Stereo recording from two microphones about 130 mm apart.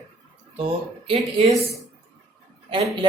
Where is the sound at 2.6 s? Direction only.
40° right (ahead or behind).